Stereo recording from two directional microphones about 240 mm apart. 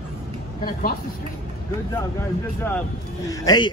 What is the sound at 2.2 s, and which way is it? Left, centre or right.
Speech, centre.